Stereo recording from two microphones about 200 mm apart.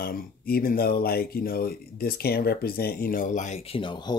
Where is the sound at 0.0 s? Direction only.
45° left (ahead or behind).